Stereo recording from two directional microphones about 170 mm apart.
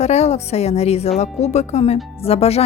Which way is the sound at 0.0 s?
40° left (ahead or behind).